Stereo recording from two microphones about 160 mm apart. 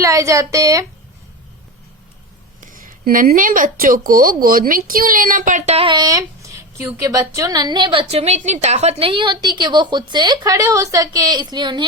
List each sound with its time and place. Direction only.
0.0 s speech: 20° right (ahead or behind)
2.6 s speech: 55° right (ahead or behind); by 11.9 s 30° right (ahead or behind)